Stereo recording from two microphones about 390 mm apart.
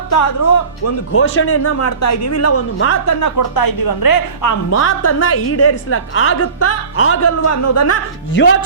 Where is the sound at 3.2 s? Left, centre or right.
Left.